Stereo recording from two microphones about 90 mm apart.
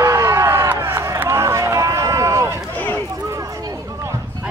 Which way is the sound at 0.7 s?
30° right (ahead or behind).